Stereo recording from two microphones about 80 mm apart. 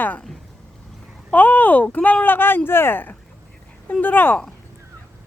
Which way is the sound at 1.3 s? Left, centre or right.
Left.